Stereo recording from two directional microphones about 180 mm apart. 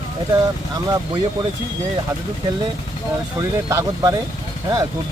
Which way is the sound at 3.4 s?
20° right (ahead or behind).